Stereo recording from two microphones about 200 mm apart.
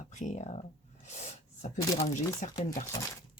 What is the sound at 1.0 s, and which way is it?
Sneeze, 35° left (ahead or behind).